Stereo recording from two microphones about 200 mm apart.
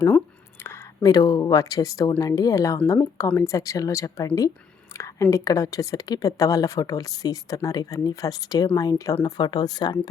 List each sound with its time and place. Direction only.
0.6 s a woman's voice: 15° left (ahead or behind)